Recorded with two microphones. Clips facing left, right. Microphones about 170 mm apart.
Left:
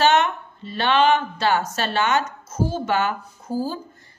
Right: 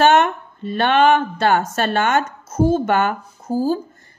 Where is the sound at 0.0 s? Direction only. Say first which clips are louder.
Right 4 dB; 50° right (ahead or behind).